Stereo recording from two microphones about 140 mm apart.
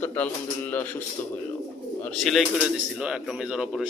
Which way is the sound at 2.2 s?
5° right (ahead or behind).